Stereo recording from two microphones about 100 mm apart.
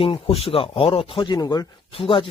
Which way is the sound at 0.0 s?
70° left (ahead or behind).